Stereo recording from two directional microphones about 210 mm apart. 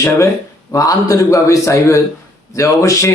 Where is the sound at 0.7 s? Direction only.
15° left (ahead or behind).